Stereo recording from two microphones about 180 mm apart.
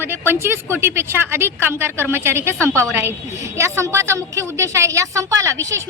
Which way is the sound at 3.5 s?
15° right (ahead or behind).